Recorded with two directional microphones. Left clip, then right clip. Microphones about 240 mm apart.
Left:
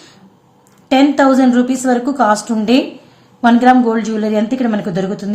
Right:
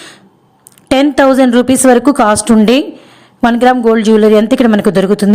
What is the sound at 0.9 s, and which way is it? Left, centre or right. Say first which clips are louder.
Speech: right 3 dB; right.